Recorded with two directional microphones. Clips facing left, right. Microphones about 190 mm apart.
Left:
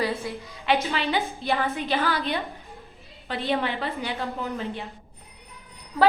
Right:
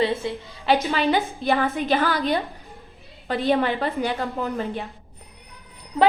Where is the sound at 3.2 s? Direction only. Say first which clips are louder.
Right 5 dB; 45° right (ahead or behind).